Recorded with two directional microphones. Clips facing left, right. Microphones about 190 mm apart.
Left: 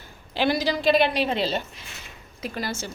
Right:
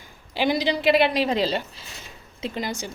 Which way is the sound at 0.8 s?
80° right.